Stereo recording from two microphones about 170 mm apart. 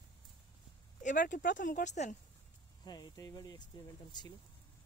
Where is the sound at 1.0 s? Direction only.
50° left (ahead or behind).